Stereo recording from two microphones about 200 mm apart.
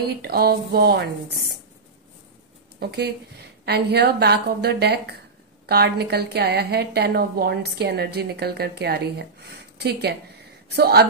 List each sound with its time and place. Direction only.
0.1 s a woman's voice: 50° right (ahead or behind)
2.8 s a woman's voice: 55° right (ahead or behind)